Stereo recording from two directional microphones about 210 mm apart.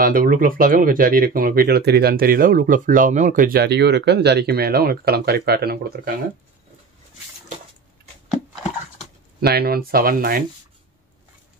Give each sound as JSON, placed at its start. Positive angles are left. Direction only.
{"t": 0.0, "sound": "speech", "side_deg": -45}
{"t": 9.4, "sound": "speech", "side_deg": -50}